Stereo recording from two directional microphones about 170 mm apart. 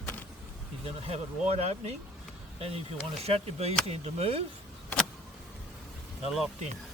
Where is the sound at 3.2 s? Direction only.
35° right (ahead or behind).